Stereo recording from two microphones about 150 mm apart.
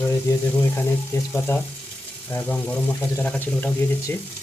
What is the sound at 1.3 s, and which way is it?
Speech, 15° left (ahead or behind).